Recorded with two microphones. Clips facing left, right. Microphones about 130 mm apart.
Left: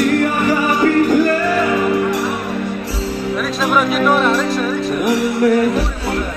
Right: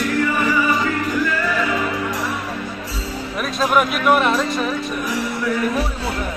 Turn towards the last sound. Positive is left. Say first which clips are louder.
# left 7 dB
turn(degrees=70)  # may be behind; listen again after turning